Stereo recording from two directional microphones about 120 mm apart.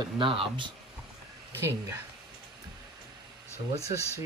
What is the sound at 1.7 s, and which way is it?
Speech, 20° right (ahead or behind).